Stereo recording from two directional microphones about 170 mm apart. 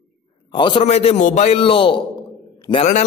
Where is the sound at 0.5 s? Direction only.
30° left (ahead or behind).